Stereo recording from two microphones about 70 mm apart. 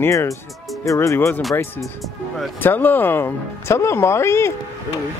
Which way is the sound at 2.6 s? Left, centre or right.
Left.